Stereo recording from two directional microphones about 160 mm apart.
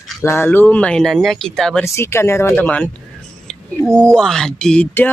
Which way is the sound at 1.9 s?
15° left (ahead or behind).